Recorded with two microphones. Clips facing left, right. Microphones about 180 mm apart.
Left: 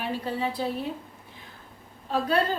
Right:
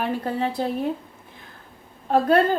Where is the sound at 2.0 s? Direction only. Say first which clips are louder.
Right 7 dB; 55° right (ahead or behind).